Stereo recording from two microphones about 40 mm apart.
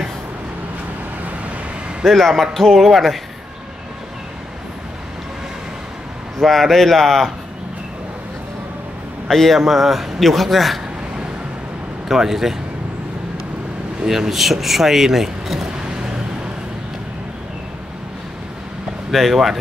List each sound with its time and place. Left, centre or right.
2.0 s speech: centre
6.4 s speech: centre
9.3 s a man's voice: centre
9.6 s speech: centre
12.1 s speech: centre
14.0 s speech: centre
15.8 s vehicle: right
19.1 s speech: centre